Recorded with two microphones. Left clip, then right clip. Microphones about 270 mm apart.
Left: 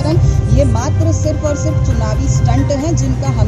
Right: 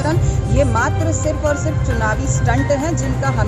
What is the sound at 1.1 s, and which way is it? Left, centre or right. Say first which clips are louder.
Speech: left 1 dB; centre.